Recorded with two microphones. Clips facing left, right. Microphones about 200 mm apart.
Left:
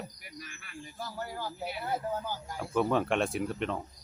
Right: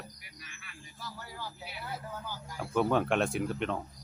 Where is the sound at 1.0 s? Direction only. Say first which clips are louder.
Left 6 dB; 50° left (ahead or behind).